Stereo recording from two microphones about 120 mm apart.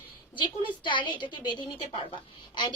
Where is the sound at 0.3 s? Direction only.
40° left (ahead or behind).